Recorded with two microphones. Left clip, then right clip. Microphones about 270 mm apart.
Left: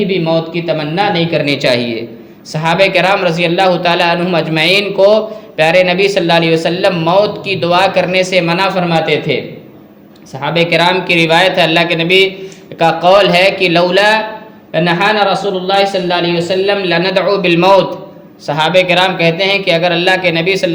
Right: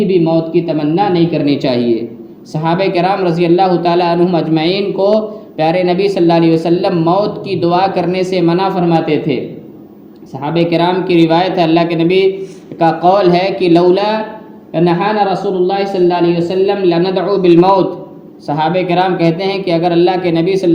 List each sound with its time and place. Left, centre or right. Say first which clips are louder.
0.5 s a man's voice: right 1 dB; left
10.4 s a man's voice: left 2 dB; left